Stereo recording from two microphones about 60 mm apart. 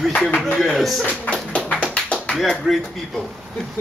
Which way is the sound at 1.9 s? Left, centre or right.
Centre.